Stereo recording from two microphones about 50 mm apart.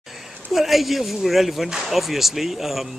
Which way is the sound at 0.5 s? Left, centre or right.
Centre.